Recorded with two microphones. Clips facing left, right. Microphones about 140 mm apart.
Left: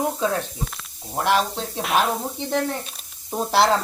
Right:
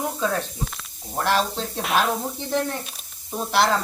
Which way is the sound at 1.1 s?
10° left (ahead or behind).